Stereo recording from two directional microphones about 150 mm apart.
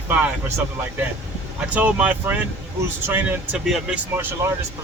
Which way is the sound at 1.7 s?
10° right (ahead or behind).